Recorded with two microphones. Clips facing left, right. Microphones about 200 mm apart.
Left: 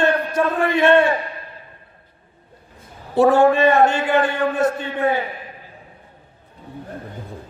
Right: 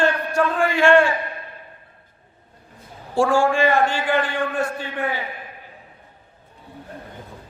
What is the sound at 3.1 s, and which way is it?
Speech, 20° left (ahead or behind).